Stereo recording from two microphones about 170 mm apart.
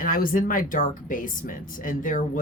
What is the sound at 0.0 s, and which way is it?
Speech, 55° left (ahead or behind).